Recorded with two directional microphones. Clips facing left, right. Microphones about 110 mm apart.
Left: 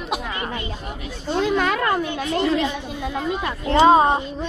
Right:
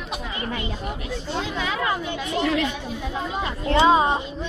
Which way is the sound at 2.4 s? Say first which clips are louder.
Left 2 dB; 20° left (ahead or behind).